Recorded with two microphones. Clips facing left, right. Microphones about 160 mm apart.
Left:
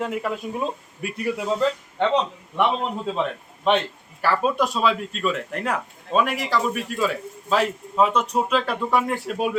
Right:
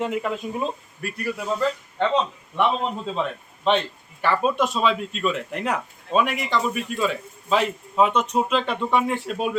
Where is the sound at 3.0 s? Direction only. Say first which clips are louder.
Left 1 dB; 5° left (ahead or behind).